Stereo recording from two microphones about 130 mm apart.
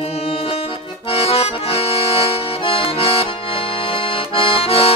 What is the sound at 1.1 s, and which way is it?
Accordion, 50° left (ahead or behind).